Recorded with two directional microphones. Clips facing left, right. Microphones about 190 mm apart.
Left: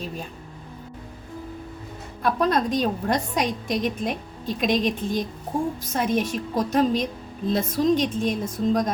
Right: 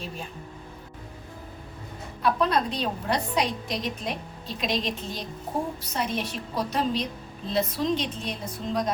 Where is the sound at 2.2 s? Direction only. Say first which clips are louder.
Left 2 dB; 45° left (ahead or behind).